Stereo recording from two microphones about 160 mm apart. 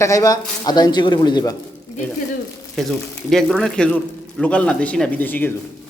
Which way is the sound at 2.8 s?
Centre (ahead or behind).